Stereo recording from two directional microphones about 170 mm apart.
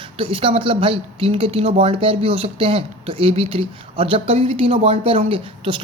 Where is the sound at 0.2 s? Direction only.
30° right (ahead or behind).